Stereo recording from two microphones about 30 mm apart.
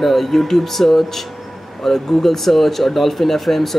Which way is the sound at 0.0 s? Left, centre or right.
Centre.